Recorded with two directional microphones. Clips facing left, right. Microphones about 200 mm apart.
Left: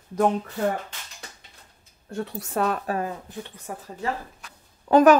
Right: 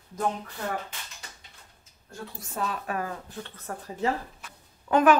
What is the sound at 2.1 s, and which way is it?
Speech, 70° left (ahead or behind).